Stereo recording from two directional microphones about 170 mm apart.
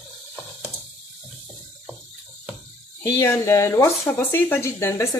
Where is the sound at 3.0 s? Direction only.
15° left (ahead or behind).